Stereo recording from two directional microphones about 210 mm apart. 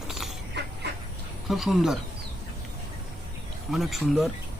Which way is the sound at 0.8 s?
50° right (ahead or behind).